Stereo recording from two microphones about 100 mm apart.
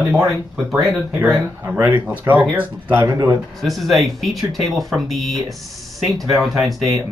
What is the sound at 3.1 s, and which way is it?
Speech, 40° right (ahead or behind).